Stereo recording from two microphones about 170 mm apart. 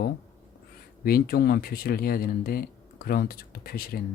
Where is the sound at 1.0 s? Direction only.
60° left (ahead or behind).